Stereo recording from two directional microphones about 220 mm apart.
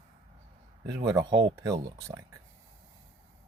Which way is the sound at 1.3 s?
55° right (ahead or behind).